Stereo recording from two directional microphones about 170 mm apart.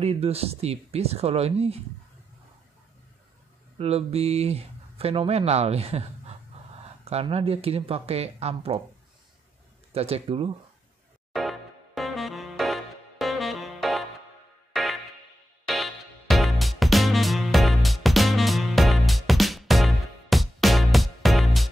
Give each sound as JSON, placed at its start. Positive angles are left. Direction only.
{"t": 0.0, "sound": "speech", "side_deg": -35}
{"t": 3.7, "sound": "speech", "side_deg": -35}
{"t": 9.9, "sound": "speech", "side_deg": -35}
{"t": 11.3, "sound": "music", "side_deg": 0}